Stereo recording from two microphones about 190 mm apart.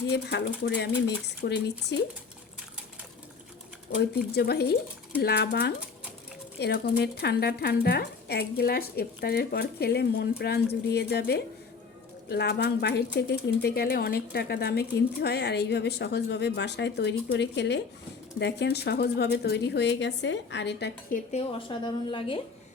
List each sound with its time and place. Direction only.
0.1 s speech: 65° left (ahead or behind)
4.3 s speech: 60° left (ahead or behind)
21.3 s a woman's voice: 30° left (ahead or behind)